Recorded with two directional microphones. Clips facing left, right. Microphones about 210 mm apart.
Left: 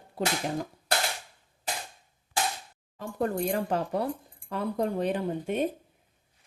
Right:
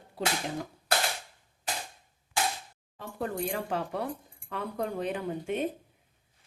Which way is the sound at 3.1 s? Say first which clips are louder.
Left 4 dB; 45° left (ahead or behind).